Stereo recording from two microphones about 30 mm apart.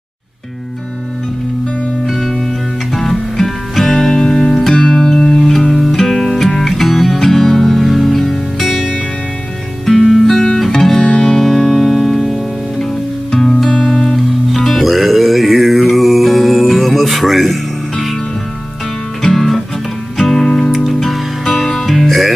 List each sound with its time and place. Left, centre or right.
2.0 s music: centre
10.2 s music: centre
11.7 s music: centre
13.3 s music: centre
14.1 s music: centre
19.2 s music: centre